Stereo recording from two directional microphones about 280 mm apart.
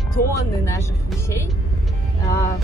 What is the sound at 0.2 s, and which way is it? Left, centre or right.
Speech, centre.